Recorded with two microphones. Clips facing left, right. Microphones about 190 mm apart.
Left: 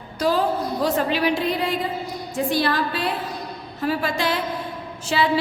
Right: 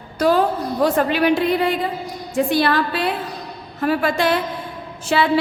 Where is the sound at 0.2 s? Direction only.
60° right (ahead or behind).